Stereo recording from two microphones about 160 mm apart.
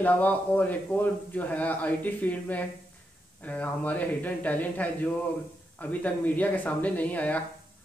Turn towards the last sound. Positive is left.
turn(degrees=10)  # may be behind; listen again after turning